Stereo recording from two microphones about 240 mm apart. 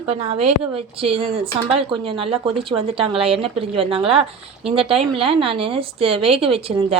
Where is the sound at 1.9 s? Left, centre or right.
Right.